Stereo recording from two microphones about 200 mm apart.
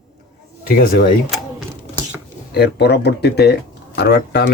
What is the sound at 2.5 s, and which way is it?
Speech, 55° left (ahead or behind).